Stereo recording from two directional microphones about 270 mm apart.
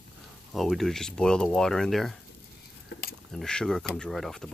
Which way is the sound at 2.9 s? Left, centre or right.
Left.